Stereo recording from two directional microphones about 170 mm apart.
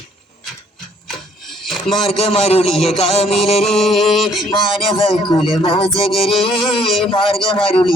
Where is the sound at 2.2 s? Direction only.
35° left (ahead or behind).